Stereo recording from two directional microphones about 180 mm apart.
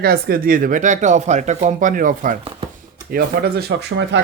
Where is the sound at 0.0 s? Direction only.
55° right (ahead or behind).